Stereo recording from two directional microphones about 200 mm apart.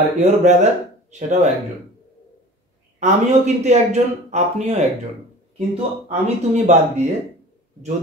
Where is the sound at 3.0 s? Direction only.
35° right (ahead or behind).